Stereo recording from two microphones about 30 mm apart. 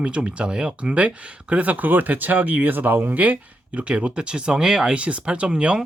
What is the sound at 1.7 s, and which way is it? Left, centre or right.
Speech, right.